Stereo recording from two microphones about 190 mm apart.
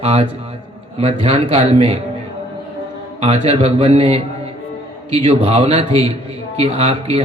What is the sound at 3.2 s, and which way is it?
Speech, 30° right (ahead or behind).